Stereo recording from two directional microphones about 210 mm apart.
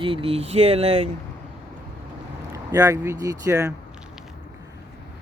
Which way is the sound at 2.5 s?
15° right (ahead or behind).